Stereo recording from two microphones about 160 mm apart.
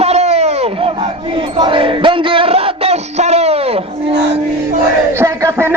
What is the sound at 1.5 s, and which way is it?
Music, 30° right (ahead or behind).